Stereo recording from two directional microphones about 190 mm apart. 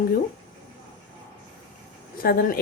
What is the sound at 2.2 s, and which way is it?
Speech, 50° left (ahead or behind).